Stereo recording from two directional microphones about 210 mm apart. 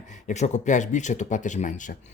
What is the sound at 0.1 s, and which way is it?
Speech, 35° left (ahead or behind).